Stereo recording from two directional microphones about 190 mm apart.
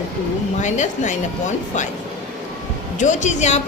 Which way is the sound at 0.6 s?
40° left (ahead or behind).